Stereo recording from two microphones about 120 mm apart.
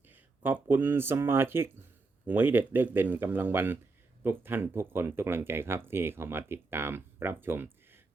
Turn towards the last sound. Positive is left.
turn(degrees=-20)  # may be behind; listen again after turning